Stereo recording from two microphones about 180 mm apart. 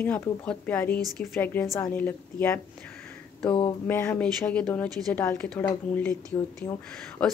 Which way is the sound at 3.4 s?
25° left (ahead or behind).